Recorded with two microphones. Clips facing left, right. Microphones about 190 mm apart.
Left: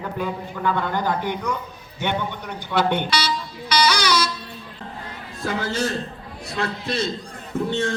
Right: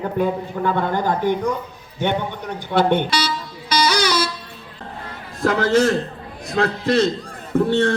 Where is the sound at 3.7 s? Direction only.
50° right (ahead or behind).